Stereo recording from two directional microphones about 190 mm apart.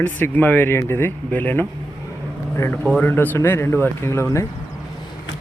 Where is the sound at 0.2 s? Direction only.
10° left (ahead or behind).